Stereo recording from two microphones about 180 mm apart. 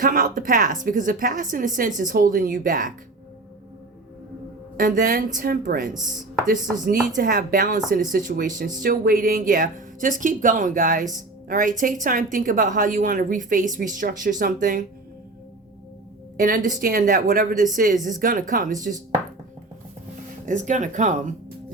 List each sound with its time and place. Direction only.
0.0 s speech: 50° right (ahead or behind)
4.8 s speech: 50° right (ahead or behind)
16.4 s speech: 50° right (ahead or behind)
20.4 s speech: 45° right (ahead or behind)